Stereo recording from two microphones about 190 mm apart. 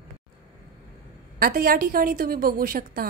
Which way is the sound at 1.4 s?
50° right (ahead or behind).